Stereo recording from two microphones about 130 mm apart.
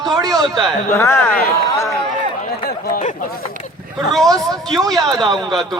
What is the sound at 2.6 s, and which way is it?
Chatter, 90° left.